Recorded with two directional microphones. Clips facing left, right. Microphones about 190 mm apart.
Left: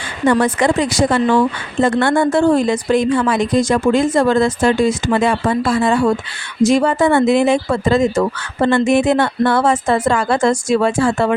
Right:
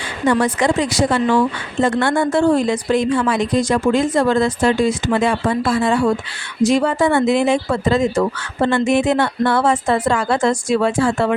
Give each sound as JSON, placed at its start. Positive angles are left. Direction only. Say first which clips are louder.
{"t": 0.3, "sound": "speech", "louder": "left 2 dB", "side_deg": 55}